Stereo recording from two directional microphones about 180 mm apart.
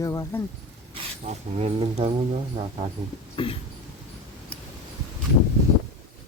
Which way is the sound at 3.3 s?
30° left (ahead or behind).